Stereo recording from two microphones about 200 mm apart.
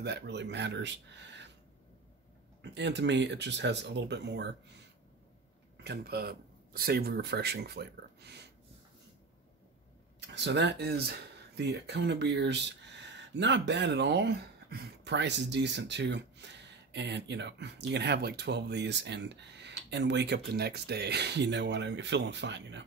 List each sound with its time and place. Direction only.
0.0 s speech: 55° right (ahead or behind)
2.6 s speech: 60° right (ahead or behind)
5.9 s speech: 50° right (ahead or behind)
10.2 s speech: 60° right (ahead or behind)